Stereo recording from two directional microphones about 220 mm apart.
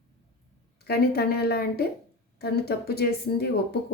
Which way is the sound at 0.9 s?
45° left (ahead or behind).